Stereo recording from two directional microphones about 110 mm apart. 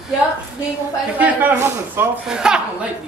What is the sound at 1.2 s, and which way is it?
Speech, 15° right (ahead or behind).